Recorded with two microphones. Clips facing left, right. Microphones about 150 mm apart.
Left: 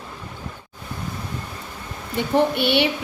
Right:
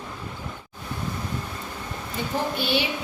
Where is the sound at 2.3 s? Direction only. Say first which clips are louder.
Left 7 dB; 65° left (ahead or behind).